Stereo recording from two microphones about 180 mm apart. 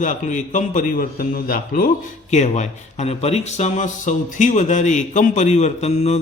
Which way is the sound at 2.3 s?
40° left (ahead or behind).